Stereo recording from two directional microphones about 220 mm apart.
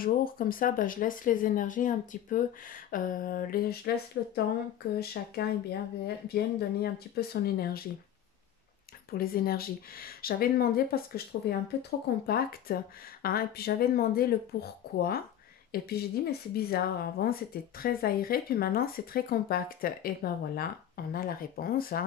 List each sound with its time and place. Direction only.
0.0 s speech: 40° left (ahead or behind)
9.1 s speech: 40° left (ahead or behind)